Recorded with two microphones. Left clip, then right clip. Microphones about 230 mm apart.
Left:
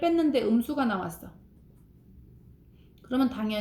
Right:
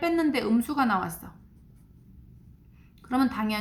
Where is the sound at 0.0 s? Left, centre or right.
Right.